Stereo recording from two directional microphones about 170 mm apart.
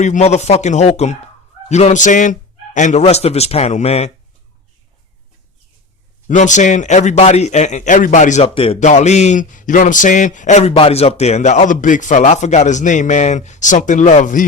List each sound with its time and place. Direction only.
0.0 s speech: 40° left (ahead or behind)
6.2 s speech: 45° left (ahead or behind)
8.4 s speech: 30° left (ahead or behind)